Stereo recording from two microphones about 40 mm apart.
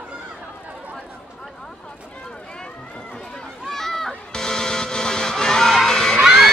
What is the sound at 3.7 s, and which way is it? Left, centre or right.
Run, centre.